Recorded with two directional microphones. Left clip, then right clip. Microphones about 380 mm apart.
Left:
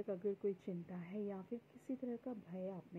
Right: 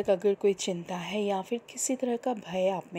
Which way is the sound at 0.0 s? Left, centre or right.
Right.